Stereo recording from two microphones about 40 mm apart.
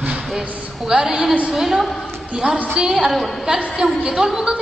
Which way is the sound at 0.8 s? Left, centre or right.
Centre.